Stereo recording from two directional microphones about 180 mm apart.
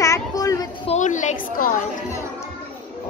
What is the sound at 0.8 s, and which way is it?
A woman's voice, 40° left (ahead or behind).